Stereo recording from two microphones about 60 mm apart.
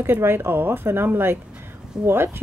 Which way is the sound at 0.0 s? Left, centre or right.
Right.